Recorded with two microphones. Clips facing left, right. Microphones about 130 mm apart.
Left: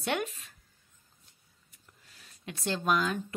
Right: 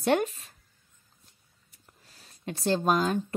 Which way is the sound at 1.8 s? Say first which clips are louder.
Right 2 dB; 35° right (ahead or behind).